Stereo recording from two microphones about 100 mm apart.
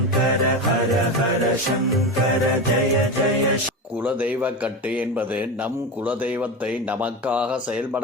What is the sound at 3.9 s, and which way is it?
Speech, 15° right (ahead or behind).